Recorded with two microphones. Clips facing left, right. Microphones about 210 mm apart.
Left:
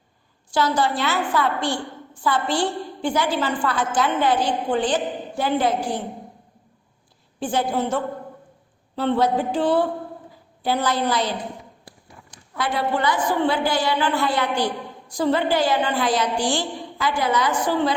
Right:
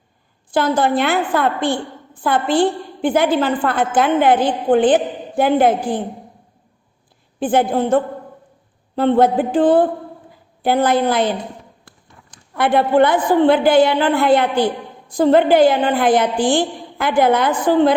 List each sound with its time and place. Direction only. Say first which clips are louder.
0.5 s a woman's voice: right 5 dB; 55° right (ahead or behind)
7.3 s a woman's voice: right 6 dB; 55° right (ahead or behind)
9.0 s a sound: right 6 dB; 55° right (ahead or behind)
10.6 s a woman's voice: right 7 dB; 55° right (ahead or behind)
12.5 s a woman's voice: right 10 dB; 55° right (ahead or behind)